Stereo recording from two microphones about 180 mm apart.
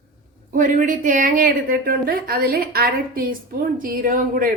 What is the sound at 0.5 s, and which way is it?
A woman's voice, 45° right (ahead or behind).